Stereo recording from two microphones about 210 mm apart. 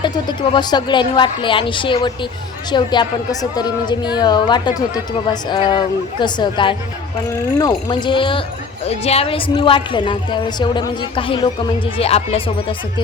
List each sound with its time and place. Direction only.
0.0 s speech: 20° left (ahead or behind)